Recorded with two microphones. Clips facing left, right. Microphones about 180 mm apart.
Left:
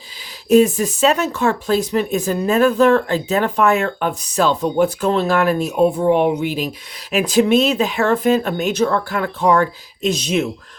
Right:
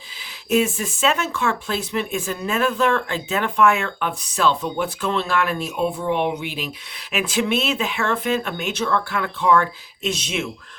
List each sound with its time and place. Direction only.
0.4 s speech: 40° left (ahead or behind)